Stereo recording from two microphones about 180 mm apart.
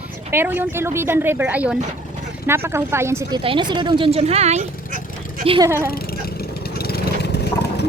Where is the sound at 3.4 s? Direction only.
25° right (ahead or behind).